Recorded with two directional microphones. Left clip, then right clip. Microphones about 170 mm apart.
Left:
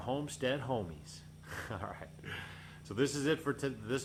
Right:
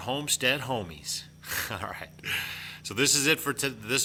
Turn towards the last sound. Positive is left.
turn(degrees=-10)  # may be behind; listen again after turning